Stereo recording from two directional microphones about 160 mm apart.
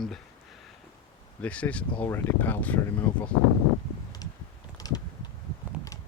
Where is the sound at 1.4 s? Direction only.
10° left (ahead or behind).